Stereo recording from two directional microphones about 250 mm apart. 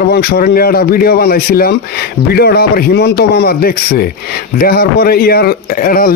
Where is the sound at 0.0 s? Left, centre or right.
Left.